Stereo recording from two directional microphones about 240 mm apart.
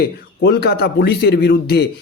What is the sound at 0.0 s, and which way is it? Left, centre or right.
Speech, left.